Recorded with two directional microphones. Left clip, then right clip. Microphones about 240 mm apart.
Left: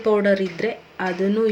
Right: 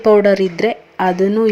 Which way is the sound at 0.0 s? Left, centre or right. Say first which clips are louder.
Right 8 dB; right.